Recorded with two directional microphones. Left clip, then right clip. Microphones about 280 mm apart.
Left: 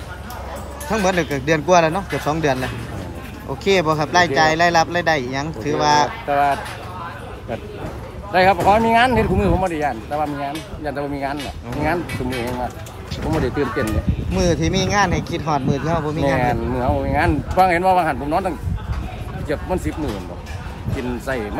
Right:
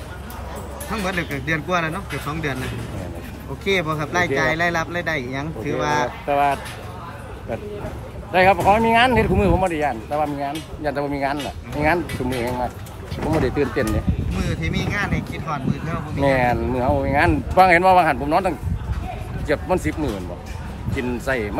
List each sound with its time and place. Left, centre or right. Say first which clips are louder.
1.0 s speech: left 6 dB; centre
3.7 s speech: left 5 dB; centre
8.3 s speech: left 1 dB; centre
14.4 s speech: left 8 dB; centre
16.2 s speech: right 4 dB; centre